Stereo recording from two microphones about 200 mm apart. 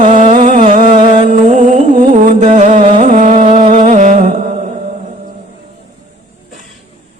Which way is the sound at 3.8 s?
40° right (ahead or behind).